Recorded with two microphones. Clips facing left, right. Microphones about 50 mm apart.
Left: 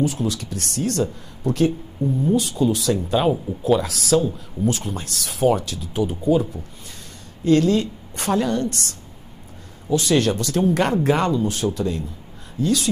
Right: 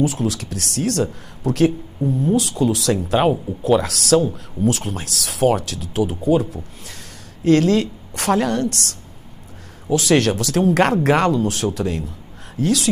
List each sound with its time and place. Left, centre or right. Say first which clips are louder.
0.0 s speech: right 2 dB; right
2.9 s speech: right 2 dB; right
7.4 s speech: right 2 dB; right
9.8 s speech: right 2 dB; right